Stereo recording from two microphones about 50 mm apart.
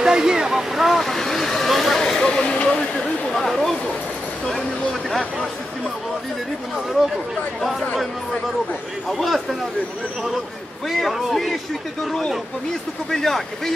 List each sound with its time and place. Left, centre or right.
0.0 s speech: centre
9.2 s speech: centre
10.9 s speech: centre
13.1 s speech: centre